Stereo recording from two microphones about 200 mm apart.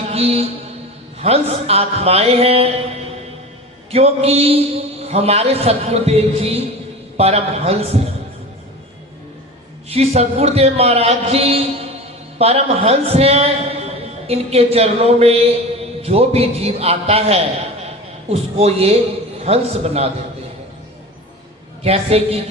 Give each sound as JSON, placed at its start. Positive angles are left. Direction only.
{"t": 0.1, "sound": "mantra", "side_deg": -30}
{"t": 1.2, "sound": "a man's voice", "side_deg": -30}
{"t": 3.9, "sound": "a man's voice", "side_deg": -30}
{"t": 9.9, "sound": "a man's voice", "side_deg": -30}
{"t": 21.8, "sound": "a man's voice", "side_deg": -30}